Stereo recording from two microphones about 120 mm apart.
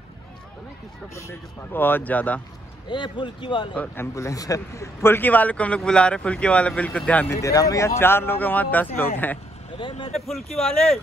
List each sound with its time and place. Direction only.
1.1 s speech: 20° left (ahead or behind)
2.9 s speech: 40° left (ahead or behind)
3.7 s a man's voice: 15° left (ahead or behind)
7.3 s a man's voice: 25° left (ahead or behind)
9.8 s speech: 45° left (ahead or behind)
10.1 s speech: centre (ahead or behind)